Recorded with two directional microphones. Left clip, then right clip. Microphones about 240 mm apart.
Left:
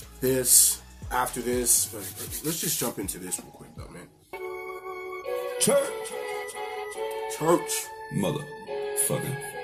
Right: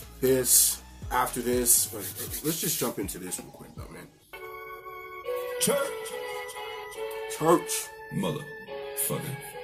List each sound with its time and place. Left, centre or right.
0.2 s speech: centre
5.3 s music: left
7.2 s speech: centre
8.2 s music: left